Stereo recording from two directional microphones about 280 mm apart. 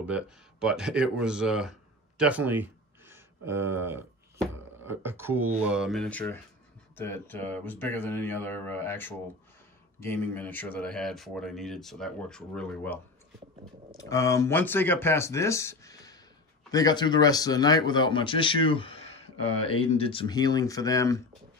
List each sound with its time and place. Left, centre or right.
0.0 s a man's voice: centre